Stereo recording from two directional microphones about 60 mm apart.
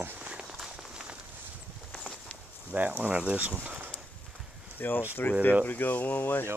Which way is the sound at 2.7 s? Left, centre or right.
Right.